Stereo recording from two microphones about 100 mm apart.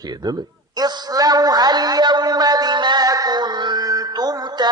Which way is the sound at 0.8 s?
45° right (ahead or behind).